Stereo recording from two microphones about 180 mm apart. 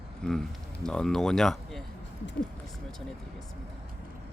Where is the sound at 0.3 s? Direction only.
5° left (ahead or behind).